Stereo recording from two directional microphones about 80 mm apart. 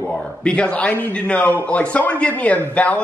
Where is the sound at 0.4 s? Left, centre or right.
Centre.